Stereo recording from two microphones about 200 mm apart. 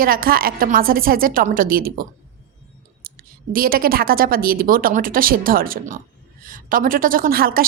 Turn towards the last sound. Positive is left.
turn(degrees=-45)  # may be behind; listen again after turning